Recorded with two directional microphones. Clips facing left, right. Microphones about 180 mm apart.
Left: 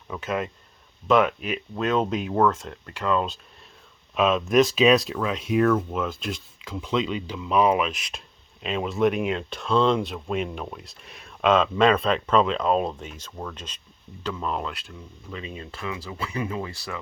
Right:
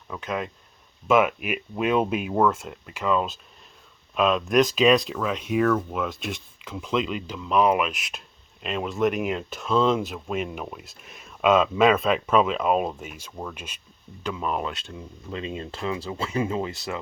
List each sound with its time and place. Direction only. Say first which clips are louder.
0.1 s speech: left 2 dB; centre (ahead or behind)
14.7 s speech: right 3 dB; 25° right (ahead or behind)